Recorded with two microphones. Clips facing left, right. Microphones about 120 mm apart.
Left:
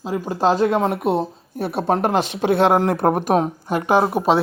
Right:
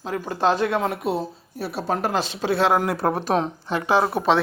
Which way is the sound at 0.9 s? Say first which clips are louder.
Left 5 dB; 55° left (ahead or behind).